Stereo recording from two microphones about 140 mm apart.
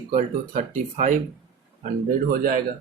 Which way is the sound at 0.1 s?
65° right (ahead or behind).